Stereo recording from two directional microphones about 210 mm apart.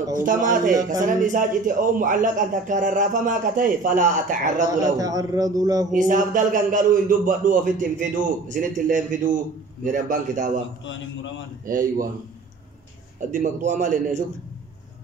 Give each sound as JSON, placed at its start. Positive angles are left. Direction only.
{"t": 0.1, "sound": "a man's voice", "side_deg": -40}
{"t": 4.8, "sound": "a man's voice", "side_deg": -15}
{"t": 5.9, "sound": "a man's voice", "side_deg": -40}
{"t": 11.6, "sound": "a man's voice", "side_deg": -40}
{"t": 13.3, "sound": "a man's voice", "side_deg": -35}